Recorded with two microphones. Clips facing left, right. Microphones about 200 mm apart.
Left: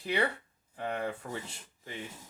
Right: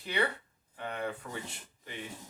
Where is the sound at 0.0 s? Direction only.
25° left (ahead or behind).